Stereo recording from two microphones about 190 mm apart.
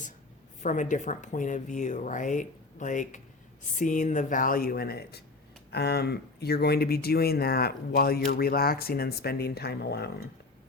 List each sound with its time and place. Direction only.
0.6 s speech: 40° left (ahead or behind); by 10.2 s 60° left (ahead or behind)